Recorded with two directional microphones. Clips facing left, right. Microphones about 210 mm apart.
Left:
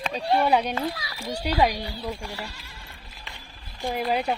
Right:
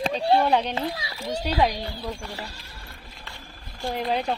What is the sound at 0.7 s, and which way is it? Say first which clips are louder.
Speech: even; 25° right (ahead or behind).